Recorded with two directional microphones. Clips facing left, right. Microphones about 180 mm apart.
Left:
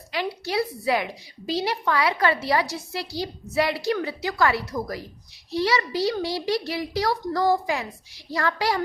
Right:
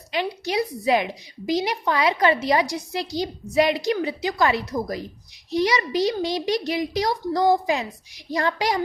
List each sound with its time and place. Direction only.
0.1 s a woman's voice: 20° right (ahead or behind)